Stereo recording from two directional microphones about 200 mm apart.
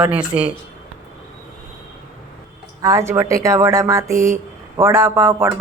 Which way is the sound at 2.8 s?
15° right (ahead or behind).